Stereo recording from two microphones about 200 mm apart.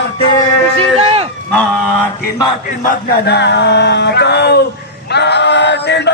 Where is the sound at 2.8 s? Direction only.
45° left (ahead or behind).